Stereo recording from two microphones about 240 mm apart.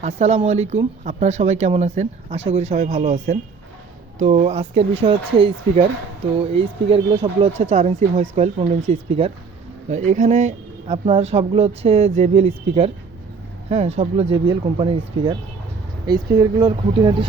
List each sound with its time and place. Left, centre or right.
0.0 s speech: right